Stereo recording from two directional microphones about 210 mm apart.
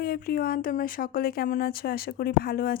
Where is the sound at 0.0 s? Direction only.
45° left (ahead or behind).